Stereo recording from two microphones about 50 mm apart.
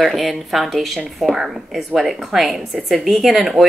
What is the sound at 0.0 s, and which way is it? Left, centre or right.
A woman's voice, centre.